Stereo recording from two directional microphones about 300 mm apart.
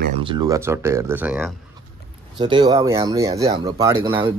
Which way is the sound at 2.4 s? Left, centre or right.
Centre.